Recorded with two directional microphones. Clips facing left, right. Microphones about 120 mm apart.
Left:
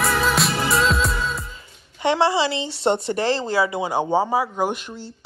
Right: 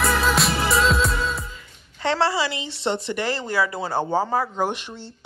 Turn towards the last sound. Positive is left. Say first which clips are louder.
# left 2 dB
turn(degrees=10)  # may be behind; listen again after turning